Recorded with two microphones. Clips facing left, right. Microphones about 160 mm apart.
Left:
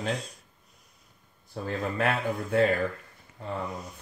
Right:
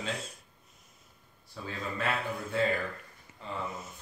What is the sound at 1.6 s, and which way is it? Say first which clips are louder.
A man's voice: left 7 dB; 55° left (ahead or behind).